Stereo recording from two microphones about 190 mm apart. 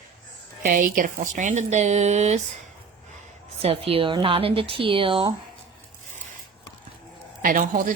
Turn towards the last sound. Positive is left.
turn(degrees=-45)  # may be behind; listen again after turning